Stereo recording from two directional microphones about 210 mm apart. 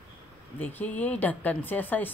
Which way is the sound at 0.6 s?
5° left (ahead or behind).